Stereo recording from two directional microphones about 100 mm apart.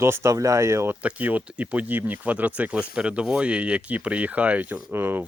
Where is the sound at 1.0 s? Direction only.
15° right (ahead or behind).